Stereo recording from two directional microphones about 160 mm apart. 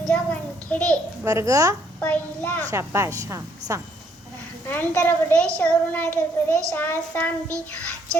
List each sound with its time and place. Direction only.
0.1 s a sound: 10° left (ahead or behind)
1.2 s speech: 20° right (ahead or behind)
2.0 s child singing: 10° left (ahead or behind)
2.6 s speech: 15° right (ahead or behind)
4.6 s child singing: 10° left (ahead or behind)